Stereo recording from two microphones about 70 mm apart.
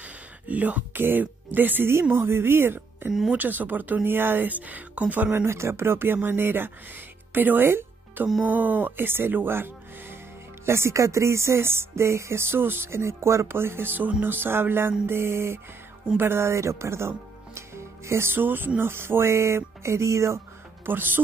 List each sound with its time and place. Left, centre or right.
0.0 s a sound: right
1.0 s music: right
3.3 s speech: right
5.4 s music: right
7.3 s speech: right
10.6 s music: right
17.6 s speech: right
18.8 s music: right
20.8 s speech: right